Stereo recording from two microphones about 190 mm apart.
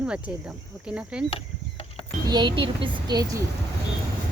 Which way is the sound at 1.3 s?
30° left (ahead or behind).